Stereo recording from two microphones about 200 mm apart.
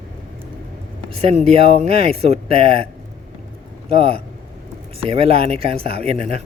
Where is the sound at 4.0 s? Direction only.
30° right (ahead or behind).